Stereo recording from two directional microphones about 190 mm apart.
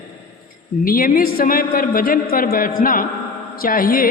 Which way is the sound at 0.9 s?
50° left (ahead or behind).